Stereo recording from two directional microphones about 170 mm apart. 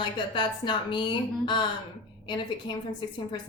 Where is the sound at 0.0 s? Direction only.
30° left (ahead or behind).